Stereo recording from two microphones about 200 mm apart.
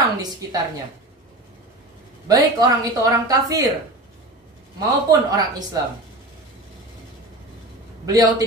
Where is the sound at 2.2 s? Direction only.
15° right (ahead or behind).